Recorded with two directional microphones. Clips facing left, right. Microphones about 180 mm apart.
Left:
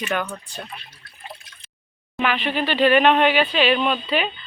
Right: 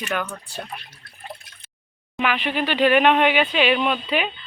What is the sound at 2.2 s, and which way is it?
A woman's voice, 10° right (ahead or behind).